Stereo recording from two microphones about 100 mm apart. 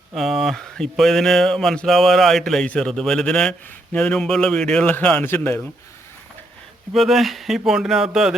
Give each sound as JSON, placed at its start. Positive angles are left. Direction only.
{"t": 0.2, "sound": "speech", "side_deg": 0}
{"t": 6.9, "sound": "speech", "side_deg": 0}